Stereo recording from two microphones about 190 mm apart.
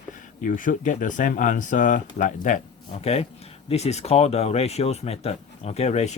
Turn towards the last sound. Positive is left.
turn(degrees=35)  # may be behind; listen again after turning